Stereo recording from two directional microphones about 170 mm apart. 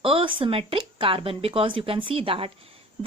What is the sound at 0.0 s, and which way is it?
Speech, 30° right (ahead or behind).